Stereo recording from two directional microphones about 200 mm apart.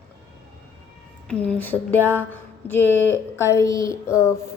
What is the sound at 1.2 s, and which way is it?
Speech, 5° left (ahead or behind).